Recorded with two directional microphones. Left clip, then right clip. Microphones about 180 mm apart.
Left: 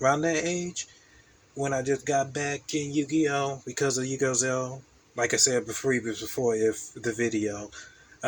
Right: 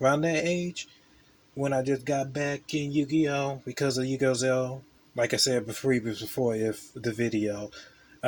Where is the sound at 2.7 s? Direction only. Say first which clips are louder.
Even; 20° right (ahead or behind).